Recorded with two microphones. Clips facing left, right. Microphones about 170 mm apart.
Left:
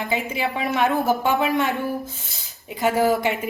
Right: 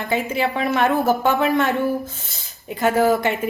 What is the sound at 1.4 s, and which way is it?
Speech, 15° left (ahead or behind).